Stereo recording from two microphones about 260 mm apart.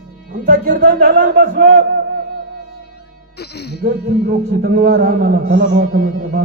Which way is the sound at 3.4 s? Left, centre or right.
Left.